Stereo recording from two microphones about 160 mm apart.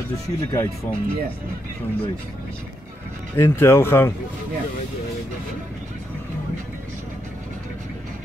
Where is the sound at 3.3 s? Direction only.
15° left (ahead or behind).